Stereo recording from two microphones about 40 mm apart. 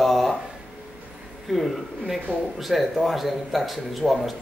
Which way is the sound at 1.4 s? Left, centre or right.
Centre.